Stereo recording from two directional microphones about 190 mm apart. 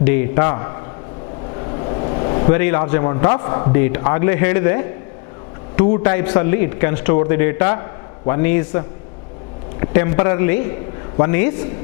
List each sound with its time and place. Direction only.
0.0 s a man's voice: 15° left (ahead or behind)
1.5 s a sound: 30° left (ahead or behind)
2.5 s a man's voice: 15° left (ahead or behind)